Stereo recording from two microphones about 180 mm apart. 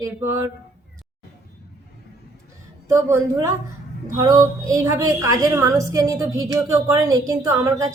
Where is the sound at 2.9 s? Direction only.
15° right (ahead or behind).